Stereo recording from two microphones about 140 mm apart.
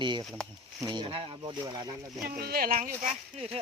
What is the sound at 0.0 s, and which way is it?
Speech, 35° right (ahead or behind).